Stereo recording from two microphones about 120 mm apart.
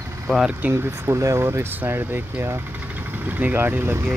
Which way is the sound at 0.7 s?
20° right (ahead or behind).